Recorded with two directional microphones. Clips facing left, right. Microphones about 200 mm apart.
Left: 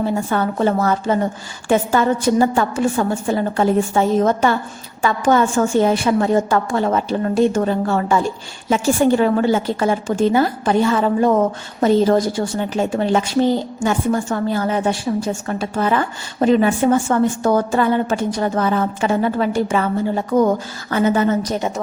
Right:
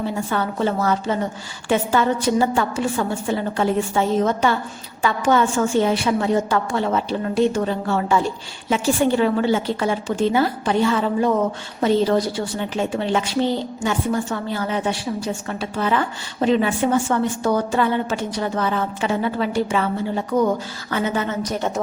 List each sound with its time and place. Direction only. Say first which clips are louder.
0.3 s a woman's voice: left 4 dB; 45° left (ahead or behind)